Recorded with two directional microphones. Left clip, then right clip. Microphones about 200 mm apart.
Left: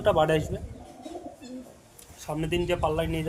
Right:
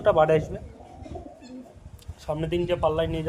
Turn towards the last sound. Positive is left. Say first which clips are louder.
# right 3 dB
turn(degrees=-35)  # may be behind; listen again after turning